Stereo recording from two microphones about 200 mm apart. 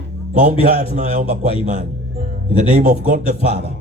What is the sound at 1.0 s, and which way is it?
Speech, 35° right (ahead or behind).